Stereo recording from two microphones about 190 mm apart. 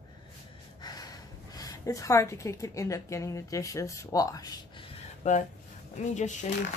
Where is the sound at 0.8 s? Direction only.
20° left (ahead or behind).